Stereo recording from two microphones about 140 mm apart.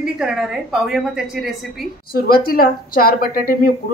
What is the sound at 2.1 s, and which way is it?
A woman's voice, 90° left.